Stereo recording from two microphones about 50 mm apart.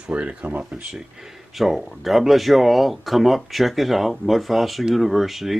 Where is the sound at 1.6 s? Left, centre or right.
Centre.